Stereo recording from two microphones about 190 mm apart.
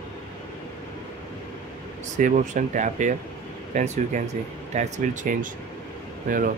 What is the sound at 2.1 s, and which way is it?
Speech, 40° right (ahead or behind).